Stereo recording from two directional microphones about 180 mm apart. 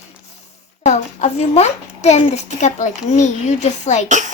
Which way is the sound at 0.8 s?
40° left (ahead or behind).